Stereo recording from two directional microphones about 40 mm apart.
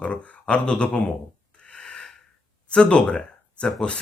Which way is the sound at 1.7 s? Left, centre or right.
Left.